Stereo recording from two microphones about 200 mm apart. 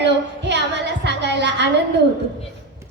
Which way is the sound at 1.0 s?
60° right (ahead or behind).